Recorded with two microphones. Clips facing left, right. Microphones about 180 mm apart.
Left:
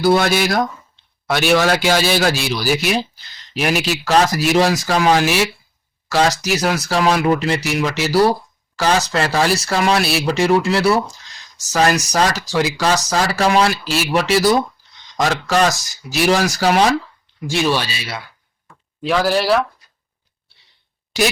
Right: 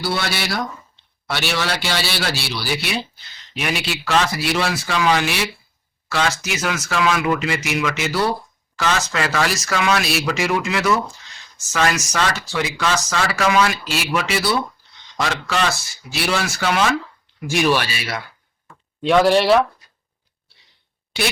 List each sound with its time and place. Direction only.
0.0 s a man's voice: 45° left (ahead or behind)
17.5 s speech: 15° right (ahead or behind)
17.7 s speech: 15° left (ahead or behind)
19.0 s speech: centre (ahead or behind)